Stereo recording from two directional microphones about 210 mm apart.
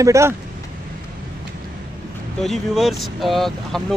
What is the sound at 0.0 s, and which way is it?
Speech, 15° right (ahead or behind).